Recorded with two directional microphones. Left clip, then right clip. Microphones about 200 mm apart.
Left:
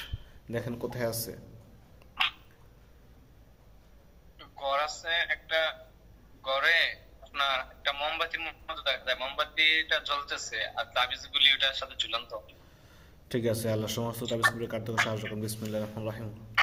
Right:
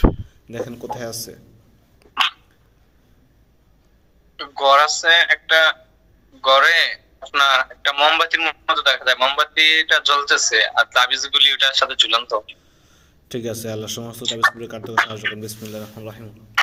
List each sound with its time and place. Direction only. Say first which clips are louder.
0.5 s speech: right 7 dB; 5° left (ahead or behind)
4.4 s a man's voice: right 17 dB; 50° right (ahead or behind)
12.9 s a man's voice: right 4 dB; 5° left (ahead or behind)